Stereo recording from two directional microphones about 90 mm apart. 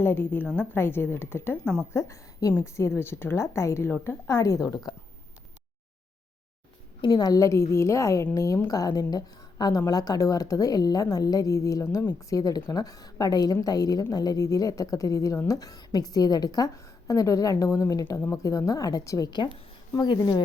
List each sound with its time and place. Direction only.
0.0 s a woman's voice: 25° left (ahead or behind)
7.0 s a woman's voice: 60° left (ahead or behind)
7.3 s a woman's voice: 35° left (ahead or behind)